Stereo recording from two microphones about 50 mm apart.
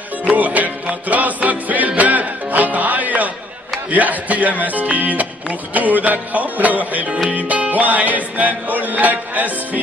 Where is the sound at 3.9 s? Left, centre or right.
Right.